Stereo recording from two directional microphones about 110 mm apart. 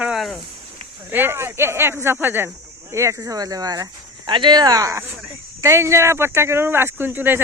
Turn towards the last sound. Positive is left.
turn(degrees=-20)  # may be behind; listen again after turning